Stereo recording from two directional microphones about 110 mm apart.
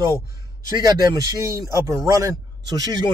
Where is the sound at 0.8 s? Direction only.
35° right (ahead or behind).